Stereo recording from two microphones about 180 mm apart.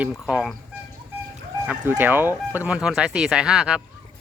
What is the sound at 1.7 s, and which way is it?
Speech, 10° right (ahead or behind).